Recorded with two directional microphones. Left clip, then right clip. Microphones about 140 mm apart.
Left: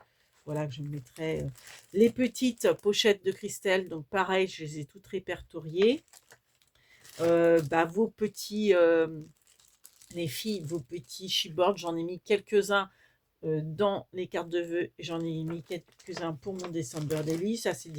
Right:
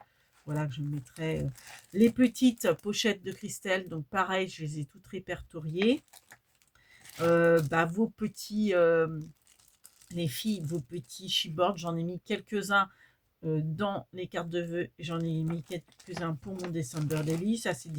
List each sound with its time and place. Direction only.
0.4 s speech: 30° left (ahead or behind)
7.3 s speech: 30° left (ahead or behind)
10.1 s speech: 30° left (ahead or behind)
16.0 s speech: 15° right (ahead or behind)
16.9 s speech: centre (ahead or behind)
17.4 s speech: 35° left (ahead or behind)